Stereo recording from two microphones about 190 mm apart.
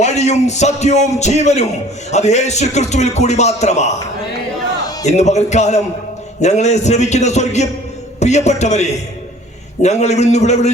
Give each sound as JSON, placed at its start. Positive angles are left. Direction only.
{"t": 0.0, "sound": "a man's voice", "side_deg": 35}
{"t": 5.0, "sound": "a man's voice", "side_deg": 35}